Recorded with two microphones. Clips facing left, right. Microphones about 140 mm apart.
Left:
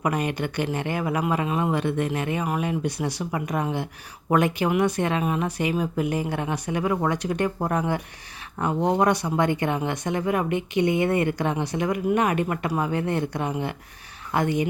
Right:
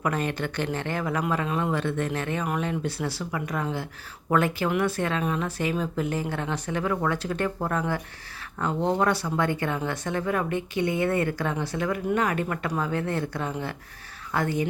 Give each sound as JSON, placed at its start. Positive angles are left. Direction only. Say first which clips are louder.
{"t": 0.0, "sound": "speech", "louder": "left 2 dB", "side_deg": 15}